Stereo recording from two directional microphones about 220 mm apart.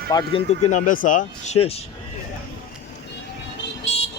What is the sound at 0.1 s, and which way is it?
Speech, 15° left (ahead or behind).